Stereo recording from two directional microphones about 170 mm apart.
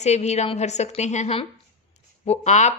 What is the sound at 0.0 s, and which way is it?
Speech, 40° left (ahead or behind).